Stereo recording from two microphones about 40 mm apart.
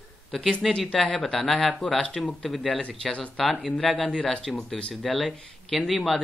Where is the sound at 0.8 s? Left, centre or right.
Centre.